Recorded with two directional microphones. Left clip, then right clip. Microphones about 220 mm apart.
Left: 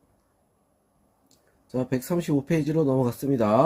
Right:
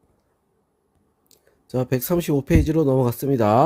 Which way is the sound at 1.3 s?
50° right (ahead or behind).